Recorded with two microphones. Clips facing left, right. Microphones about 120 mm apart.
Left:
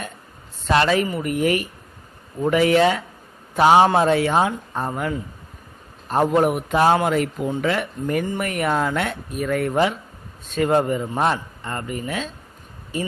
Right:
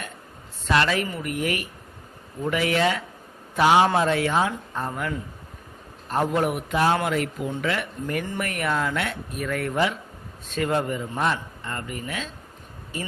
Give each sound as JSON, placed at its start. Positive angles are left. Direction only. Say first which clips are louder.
{"t": 0.7, "sound": "speech", "louder": "left 4 dB", "side_deg": 35}
{"t": 6.7, "sound": "speech", "louder": "left 5 dB", "side_deg": 40}
{"t": 9.4, "sound": "speech", "louder": "left 5 dB", "side_deg": 25}